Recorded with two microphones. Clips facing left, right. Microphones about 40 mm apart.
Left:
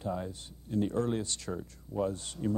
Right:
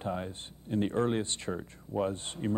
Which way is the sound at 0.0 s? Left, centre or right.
Right.